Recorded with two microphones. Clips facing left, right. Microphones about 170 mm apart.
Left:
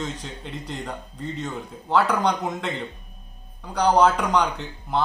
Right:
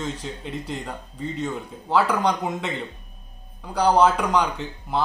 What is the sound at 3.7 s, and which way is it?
Speech, 5° right (ahead or behind).